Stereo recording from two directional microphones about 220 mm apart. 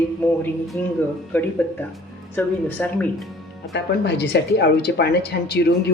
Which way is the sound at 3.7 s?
50° left (ahead or behind).